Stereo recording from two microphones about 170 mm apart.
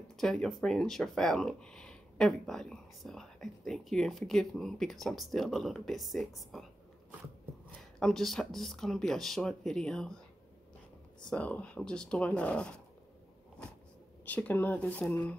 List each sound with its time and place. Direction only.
0.2 s speech: 5° left (ahead or behind)
8.0 s speech: centre (ahead or behind)
11.2 s speech: 5° left (ahead or behind)
14.2 s speech: 10° left (ahead or behind)